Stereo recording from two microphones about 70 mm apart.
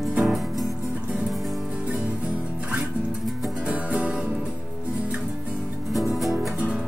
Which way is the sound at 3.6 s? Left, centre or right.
Centre.